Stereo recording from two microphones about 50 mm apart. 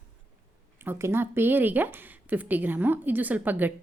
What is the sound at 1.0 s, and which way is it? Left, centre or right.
Speech, right.